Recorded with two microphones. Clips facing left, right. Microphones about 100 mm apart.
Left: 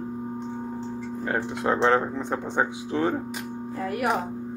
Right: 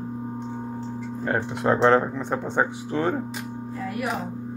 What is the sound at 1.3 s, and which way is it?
Speech, 60° right (ahead or behind).